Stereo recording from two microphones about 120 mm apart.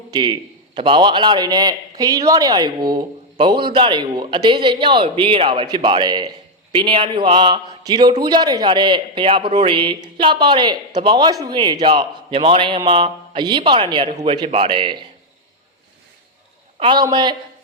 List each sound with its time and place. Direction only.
0.1 s a man's voice: 40° right (ahead or behind)
16.8 s a man's voice: 35° right (ahead or behind)